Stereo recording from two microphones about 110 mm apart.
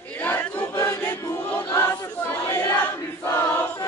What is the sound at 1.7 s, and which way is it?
Choir, 25° left (ahead or behind).